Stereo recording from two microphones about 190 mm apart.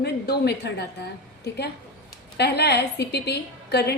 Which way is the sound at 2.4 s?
60° left (ahead or behind).